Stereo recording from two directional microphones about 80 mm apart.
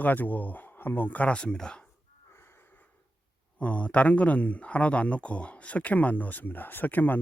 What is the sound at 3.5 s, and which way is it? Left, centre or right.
Speech, centre.